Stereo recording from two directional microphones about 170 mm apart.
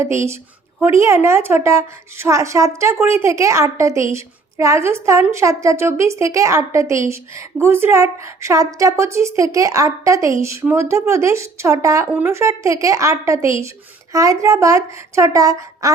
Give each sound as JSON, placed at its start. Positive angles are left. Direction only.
{"t": 0.0, "sound": "a woman's voice", "side_deg": -15}